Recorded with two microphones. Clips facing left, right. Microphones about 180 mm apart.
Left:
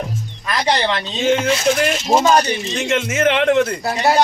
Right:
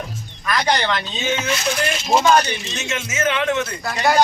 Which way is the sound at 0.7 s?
30° left (ahead or behind).